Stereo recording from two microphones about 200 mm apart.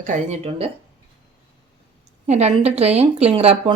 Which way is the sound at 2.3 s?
35° right (ahead or behind).